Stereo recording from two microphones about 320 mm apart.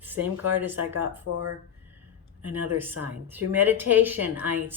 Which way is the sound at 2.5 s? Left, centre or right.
Centre.